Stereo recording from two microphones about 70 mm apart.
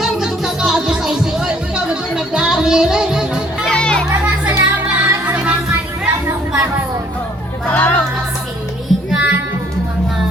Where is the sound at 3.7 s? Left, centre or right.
Centre.